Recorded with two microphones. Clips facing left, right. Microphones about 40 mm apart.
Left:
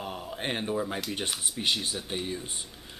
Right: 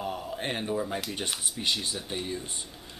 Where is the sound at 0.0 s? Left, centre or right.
Centre.